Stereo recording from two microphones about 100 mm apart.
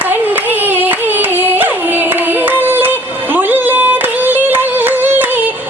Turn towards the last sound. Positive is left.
turn(degrees=-20)  # may be behind; listen again after turning